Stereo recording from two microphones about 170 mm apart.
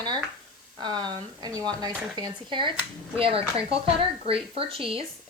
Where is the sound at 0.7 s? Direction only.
25° right (ahead or behind).